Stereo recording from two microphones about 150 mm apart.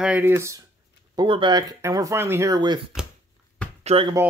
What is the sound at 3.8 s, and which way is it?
Speech, 40° right (ahead or behind).